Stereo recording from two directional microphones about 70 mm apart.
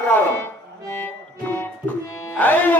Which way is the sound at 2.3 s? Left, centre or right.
Left.